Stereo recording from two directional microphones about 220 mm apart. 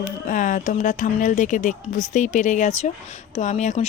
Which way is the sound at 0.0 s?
35° left (ahead or behind).